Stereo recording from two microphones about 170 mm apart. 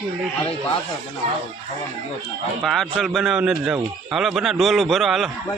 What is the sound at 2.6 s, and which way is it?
Speech, centre (ahead or behind).